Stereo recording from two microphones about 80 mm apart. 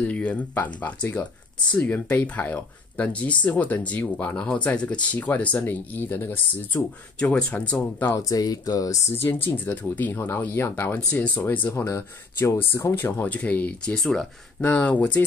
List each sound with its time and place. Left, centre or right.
0.0 s speech: centre
1.7 s speech: centre
8.2 s speech: left
9.1 s speech: left
11.7 s speech: left
13.9 s speech: centre
14.6 s speech: centre